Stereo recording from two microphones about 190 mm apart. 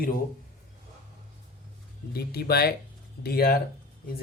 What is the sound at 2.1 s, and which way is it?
Speech, 55° left (ahead or behind).